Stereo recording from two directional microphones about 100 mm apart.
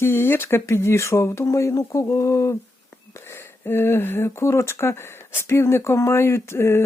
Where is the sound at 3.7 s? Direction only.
25° left (ahead or behind).